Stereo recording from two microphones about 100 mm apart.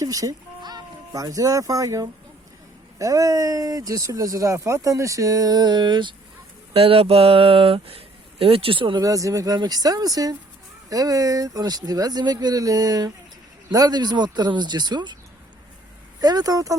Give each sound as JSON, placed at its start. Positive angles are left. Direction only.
{"t": 0.0, "sound": "speech", "side_deg": -35}
{"t": 6.7, "sound": "speech", "side_deg": -70}
{"t": 9.0, "sound": "speech", "side_deg": -35}
{"t": 16.2, "sound": "speech", "side_deg": -40}